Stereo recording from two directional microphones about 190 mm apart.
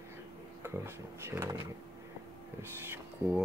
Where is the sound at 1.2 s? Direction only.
15° right (ahead or behind).